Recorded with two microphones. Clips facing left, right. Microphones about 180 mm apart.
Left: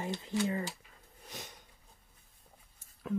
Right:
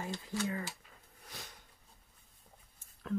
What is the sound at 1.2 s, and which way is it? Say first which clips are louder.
Sniff: left 4 dB; 20° left (ahead or behind).